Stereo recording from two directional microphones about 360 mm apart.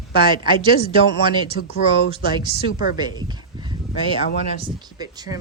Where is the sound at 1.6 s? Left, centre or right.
Left.